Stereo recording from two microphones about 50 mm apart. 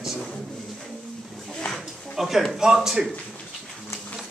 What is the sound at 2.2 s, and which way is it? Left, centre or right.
Speech, centre.